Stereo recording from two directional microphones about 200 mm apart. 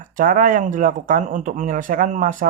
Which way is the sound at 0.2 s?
40° right (ahead or behind).